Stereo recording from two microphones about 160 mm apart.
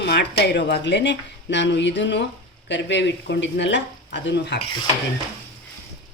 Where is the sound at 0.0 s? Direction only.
90° left.